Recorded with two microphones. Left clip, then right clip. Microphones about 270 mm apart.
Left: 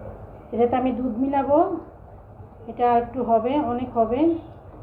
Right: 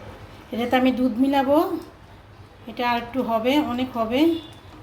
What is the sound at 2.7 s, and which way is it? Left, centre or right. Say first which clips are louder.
A woman's voice: left 4 dB; right.